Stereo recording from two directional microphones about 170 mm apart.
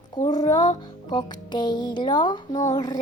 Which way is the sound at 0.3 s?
25° left (ahead or behind).